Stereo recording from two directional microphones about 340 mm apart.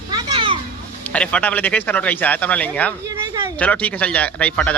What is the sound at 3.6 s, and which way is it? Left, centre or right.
Speech, centre.